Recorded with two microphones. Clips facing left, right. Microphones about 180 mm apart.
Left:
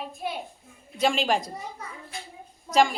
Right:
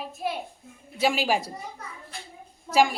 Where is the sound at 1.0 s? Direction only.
5° right (ahead or behind).